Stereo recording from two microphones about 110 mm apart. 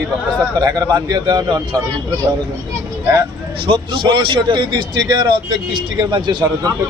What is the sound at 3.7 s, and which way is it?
A man's voice, 50° right (ahead or behind).